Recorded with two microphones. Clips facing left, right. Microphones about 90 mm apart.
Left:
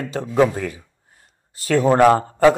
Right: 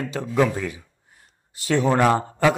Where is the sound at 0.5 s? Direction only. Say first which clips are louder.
Left 2 dB; 50° left (ahead or behind).